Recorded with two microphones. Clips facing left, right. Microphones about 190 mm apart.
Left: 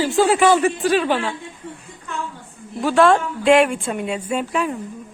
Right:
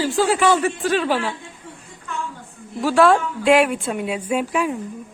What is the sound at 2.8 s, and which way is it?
A woman's voice, centre (ahead or behind).